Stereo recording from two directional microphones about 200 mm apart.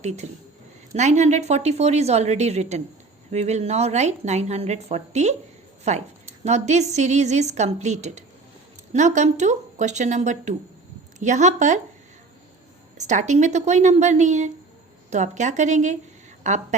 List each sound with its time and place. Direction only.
0.0 s a woman's voice: 35° right (ahead or behind)
13.0 s a woman's voice: 35° right (ahead or behind)